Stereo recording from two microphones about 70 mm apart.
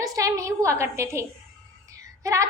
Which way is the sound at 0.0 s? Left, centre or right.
Right.